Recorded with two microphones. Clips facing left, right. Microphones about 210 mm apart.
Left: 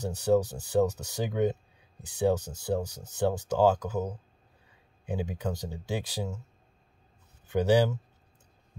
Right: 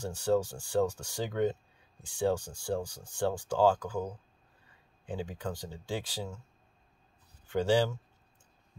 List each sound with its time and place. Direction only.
0.0 s speech: 20° left (ahead or behind)
5.1 s speech: 10° left (ahead or behind)
7.5 s speech: 15° left (ahead or behind)